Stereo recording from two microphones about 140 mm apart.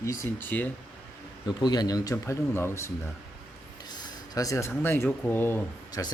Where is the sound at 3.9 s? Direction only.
25° left (ahead or behind).